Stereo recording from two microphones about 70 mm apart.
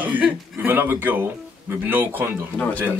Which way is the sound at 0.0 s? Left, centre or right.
Right.